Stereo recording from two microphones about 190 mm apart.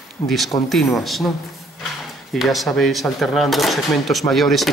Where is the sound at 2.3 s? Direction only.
Centre (ahead or behind).